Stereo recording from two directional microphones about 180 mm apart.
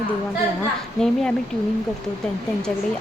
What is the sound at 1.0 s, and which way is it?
Speech, 5° left (ahead or behind).